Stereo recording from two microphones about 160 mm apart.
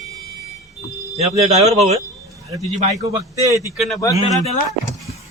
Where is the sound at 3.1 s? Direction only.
20° right (ahead or behind).